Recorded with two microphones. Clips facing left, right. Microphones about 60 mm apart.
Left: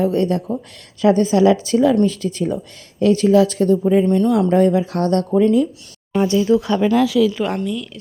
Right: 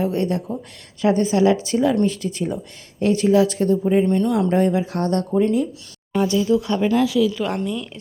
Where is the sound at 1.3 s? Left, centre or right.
Left.